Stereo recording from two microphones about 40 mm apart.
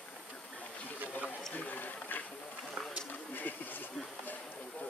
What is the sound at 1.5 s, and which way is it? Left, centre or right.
Speech, left.